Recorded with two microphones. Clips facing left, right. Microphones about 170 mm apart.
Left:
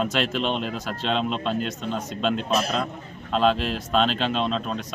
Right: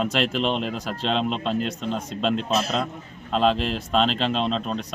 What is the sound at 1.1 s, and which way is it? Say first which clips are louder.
A man's voice: right 1 dB; centre (ahead or behind).